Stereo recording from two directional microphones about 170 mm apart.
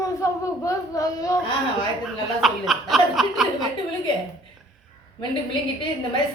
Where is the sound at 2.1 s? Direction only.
Centre (ahead or behind).